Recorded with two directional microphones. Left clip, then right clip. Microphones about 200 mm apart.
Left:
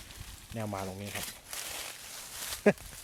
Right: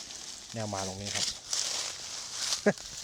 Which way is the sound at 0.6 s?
5° left (ahead or behind).